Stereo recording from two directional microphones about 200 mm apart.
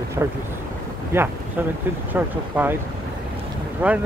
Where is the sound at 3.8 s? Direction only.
10° right (ahead or behind).